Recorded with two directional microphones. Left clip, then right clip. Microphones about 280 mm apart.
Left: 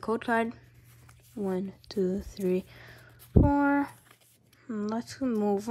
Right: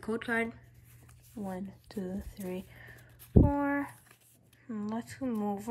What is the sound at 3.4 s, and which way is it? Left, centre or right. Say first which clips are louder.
Speech: left 6 dB; right.